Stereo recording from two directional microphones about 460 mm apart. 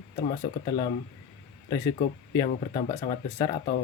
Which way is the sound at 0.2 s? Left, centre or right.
Centre.